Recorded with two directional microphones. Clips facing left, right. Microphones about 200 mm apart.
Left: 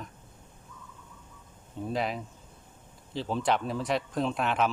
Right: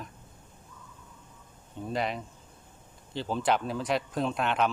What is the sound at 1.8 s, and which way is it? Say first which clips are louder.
Speech: even; centre (ahead or behind).